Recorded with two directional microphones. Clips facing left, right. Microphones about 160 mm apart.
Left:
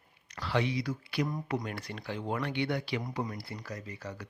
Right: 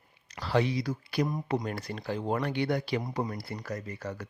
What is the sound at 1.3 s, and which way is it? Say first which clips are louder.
Speech: right 3 dB; 20° right (ahead or behind).